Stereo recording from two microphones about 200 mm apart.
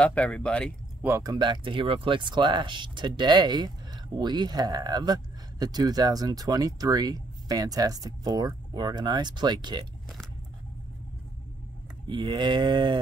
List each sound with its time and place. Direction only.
0.0 s speech: 5° left (ahead or behind)
1.0 s speech: 15° right (ahead or behind)
12.1 s speech: 20° right (ahead or behind)